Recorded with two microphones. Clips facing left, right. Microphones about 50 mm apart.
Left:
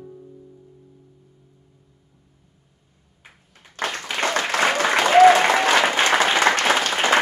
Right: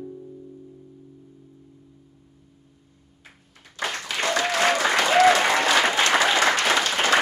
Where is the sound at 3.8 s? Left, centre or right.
Left.